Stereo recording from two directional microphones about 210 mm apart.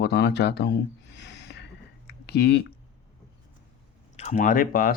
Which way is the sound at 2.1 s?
50° left (ahead or behind).